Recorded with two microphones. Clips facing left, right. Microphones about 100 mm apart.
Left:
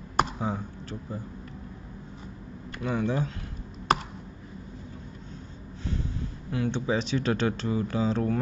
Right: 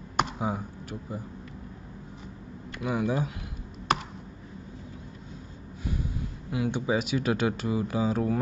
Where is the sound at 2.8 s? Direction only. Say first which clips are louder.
Even; 10° right (ahead or behind).